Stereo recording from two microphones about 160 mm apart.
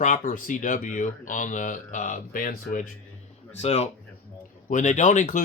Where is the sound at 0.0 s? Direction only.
55° left (ahead or behind).